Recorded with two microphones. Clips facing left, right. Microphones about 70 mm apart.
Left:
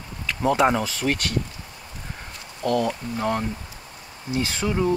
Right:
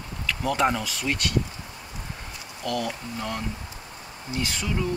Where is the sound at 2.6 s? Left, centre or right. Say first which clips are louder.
Left 6 dB; left.